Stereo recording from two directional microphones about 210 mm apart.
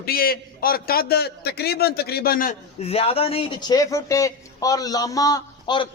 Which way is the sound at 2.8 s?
30° left (ahead or behind).